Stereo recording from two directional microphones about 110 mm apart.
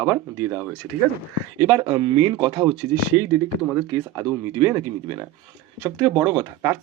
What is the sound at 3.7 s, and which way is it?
Speech, 15° right (ahead or behind).